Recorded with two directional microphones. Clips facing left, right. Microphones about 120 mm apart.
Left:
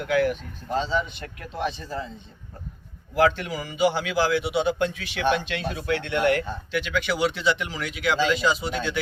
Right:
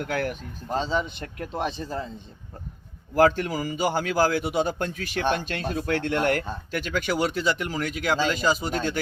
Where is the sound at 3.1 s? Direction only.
45° right (ahead or behind).